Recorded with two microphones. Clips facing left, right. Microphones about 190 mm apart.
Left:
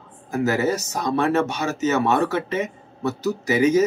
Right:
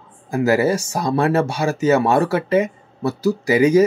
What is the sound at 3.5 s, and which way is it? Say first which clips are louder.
Speech: right 4 dB; 10° right (ahead or behind).